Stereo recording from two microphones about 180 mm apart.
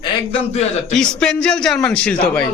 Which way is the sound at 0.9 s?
5° left (ahead or behind).